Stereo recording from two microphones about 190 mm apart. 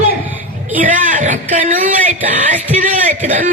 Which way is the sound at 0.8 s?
45° right (ahead or behind).